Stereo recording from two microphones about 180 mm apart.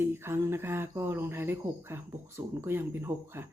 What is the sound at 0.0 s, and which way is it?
Speech, 15° right (ahead or behind).